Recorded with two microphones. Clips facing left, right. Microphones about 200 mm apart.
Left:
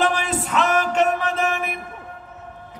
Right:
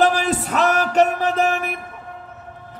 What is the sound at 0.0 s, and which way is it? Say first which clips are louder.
Music: right 4 dB; 40° right (ahead or behind).